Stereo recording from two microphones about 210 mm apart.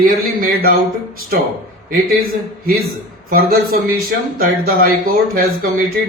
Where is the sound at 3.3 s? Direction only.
45° right (ahead or behind).